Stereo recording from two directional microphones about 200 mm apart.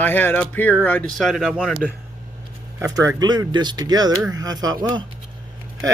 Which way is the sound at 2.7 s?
15° right (ahead or behind).